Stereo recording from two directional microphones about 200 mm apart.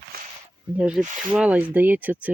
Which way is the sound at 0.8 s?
5° right (ahead or behind).